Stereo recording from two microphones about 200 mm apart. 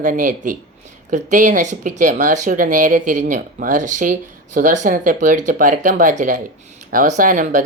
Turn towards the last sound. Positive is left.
turn(degrees=-40)  # may be behind; listen again after turning